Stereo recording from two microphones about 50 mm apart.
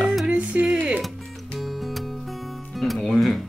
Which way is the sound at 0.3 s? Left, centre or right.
Right.